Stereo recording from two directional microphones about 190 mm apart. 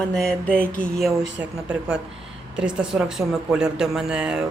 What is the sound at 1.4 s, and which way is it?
Speech, 10° right (ahead or behind).